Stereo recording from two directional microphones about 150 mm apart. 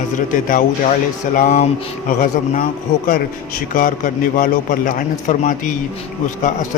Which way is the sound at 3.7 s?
65° left (ahead or behind).